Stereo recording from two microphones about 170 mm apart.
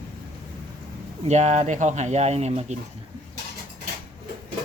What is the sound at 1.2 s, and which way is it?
Speech, 45° right (ahead or behind).